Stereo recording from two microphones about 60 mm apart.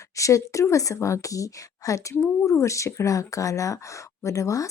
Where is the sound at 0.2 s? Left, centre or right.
Left.